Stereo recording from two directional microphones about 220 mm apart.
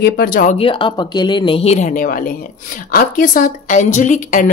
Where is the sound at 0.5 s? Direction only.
25° left (ahead or behind).